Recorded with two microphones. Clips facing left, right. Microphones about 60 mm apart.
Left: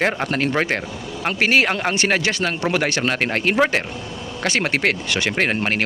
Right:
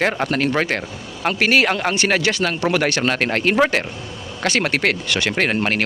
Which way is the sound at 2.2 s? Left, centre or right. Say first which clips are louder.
Right 2 dB; left.